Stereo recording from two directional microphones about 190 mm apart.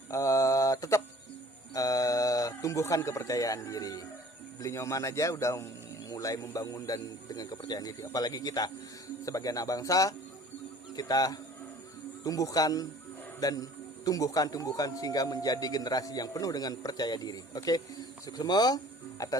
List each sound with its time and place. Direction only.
0.1 s mantra: 15° left (ahead or behind)
1.7 s a man's voice: 20° left (ahead or behind)